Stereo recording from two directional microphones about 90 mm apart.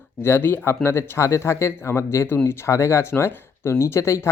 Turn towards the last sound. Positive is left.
turn(degrees=30)  # may be behind; listen again after turning